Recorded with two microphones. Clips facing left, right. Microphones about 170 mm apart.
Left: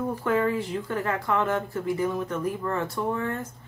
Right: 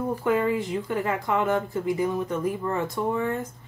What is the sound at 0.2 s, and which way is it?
A woman's voice, 15° right (ahead or behind).